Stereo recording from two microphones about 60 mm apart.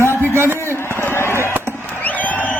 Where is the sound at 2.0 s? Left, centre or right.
Left.